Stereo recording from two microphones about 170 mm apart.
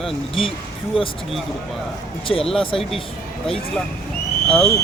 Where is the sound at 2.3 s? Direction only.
30° left (ahead or behind).